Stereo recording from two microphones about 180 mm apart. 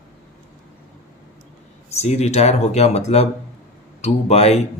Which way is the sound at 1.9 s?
35° left (ahead or behind).